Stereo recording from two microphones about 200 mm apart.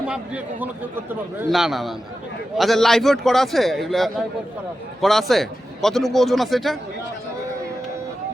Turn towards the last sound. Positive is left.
turn(degrees=0)  # may be behind; listen again after turning